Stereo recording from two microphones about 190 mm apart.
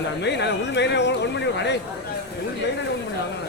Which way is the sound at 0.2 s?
65° left (ahead or behind).